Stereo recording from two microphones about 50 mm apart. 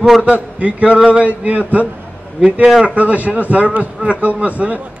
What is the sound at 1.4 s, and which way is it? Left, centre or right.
Speech, right.